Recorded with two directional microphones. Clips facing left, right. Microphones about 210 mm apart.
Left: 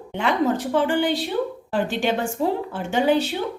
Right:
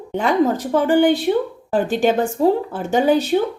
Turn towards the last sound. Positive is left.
turn(degrees=-40)  # may be behind; listen again after turning